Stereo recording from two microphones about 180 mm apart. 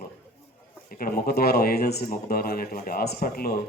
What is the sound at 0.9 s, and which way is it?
A man's voice, 55° left (ahead or behind).